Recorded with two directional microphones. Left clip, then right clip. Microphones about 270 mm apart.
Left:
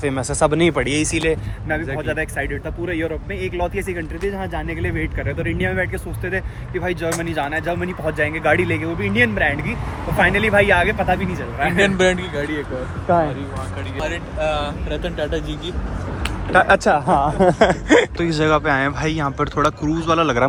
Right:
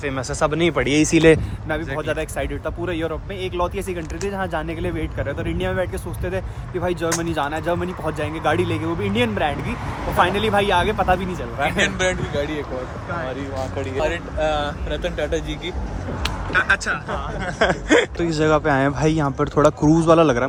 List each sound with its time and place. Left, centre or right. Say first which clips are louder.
0.0 s speech: left 3 dB; centre
0.9 s speech: right 5 dB; right
2.0 s speech: left 1 dB; centre
11.8 s speech: left 5 dB; left
13.1 s speech: left 12 dB; centre
13.7 s speech: right 3 dB; right
14.8 s speech: even; centre
16.5 s speech: left 6 dB; centre
17.6 s speech: right 2 dB; centre